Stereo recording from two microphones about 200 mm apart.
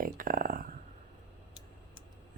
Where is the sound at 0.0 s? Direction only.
45° right (ahead or behind).